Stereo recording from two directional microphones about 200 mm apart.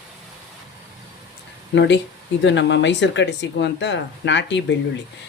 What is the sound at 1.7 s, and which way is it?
Speech, 65° left (ahead or behind).